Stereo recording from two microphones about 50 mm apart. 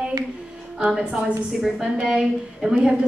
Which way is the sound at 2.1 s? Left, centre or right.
Centre.